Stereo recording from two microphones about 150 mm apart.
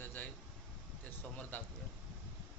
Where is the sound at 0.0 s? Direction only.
15° left (ahead or behind).